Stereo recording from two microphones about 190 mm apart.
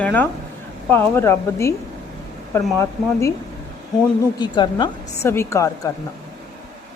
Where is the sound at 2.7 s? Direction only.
15° left (ahead or behind).